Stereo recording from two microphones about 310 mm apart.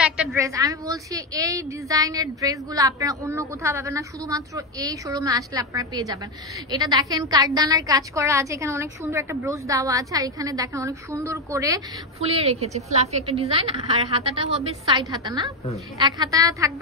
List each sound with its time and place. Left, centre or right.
0.0 s a woman's voice: centre